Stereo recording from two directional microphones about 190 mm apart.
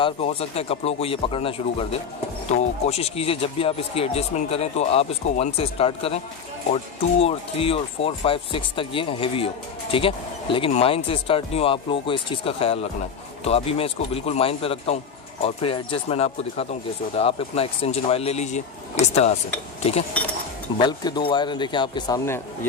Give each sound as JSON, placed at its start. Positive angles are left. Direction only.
{"t": 0.0, "sound": "speech", "side_deg": 30}
{"t": 7.2, "sound": "speech", "side_deg": 30}
{"t": 20.7, "sound": "speech", "side_deg": 20}